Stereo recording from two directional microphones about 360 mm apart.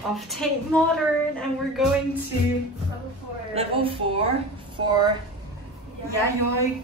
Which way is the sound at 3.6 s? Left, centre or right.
Centre.